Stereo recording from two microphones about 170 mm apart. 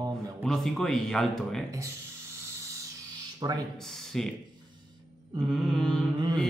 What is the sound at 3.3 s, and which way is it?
Speech, 25° right (ahead or behind).